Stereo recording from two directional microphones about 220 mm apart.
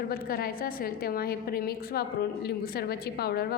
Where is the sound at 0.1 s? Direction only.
45° left (ahead or behind).